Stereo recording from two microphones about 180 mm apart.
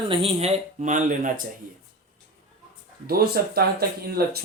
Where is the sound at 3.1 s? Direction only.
60° right (ahead or behind).